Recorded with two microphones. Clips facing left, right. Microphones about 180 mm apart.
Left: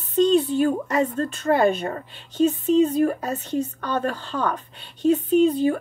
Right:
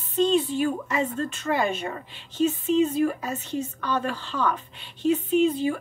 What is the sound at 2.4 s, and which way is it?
A woman's voice, 45° left (ahead or behind).